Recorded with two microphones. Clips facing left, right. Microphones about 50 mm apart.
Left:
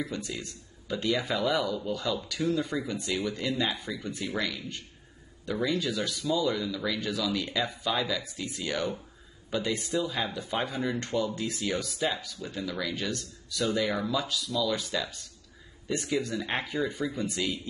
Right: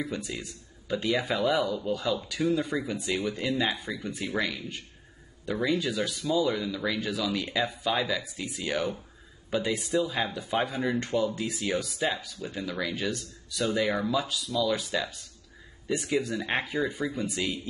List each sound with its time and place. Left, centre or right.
0.0 s speech: centre
11.3 s speech: centre